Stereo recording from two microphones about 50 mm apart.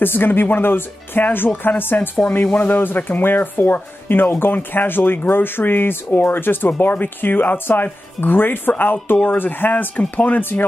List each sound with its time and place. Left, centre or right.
0.0 s speech: left